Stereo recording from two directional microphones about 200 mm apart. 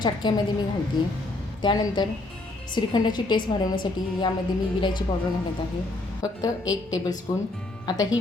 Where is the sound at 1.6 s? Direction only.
20° left (ahead or behind).